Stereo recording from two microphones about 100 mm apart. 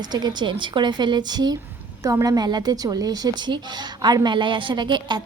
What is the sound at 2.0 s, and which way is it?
A woman's voice, 35° right (ahead or behind).